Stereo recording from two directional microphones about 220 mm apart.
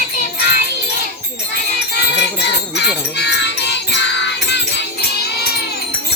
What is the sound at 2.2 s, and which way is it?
Music, 50° left (ahead or behind).